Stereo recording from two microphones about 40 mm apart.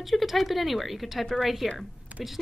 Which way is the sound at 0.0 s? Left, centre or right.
Centre.